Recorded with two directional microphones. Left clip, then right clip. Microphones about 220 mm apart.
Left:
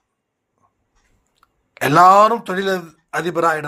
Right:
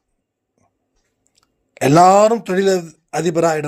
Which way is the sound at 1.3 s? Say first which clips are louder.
Even; 55° right (ahead or behind).